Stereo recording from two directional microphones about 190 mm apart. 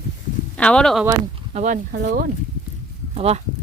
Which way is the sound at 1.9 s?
50° right (ahead or behind).